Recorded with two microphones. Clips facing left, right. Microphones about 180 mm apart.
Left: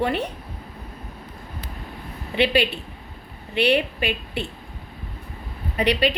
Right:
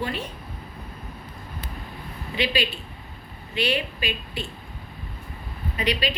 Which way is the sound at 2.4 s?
60° left (ahead or behind).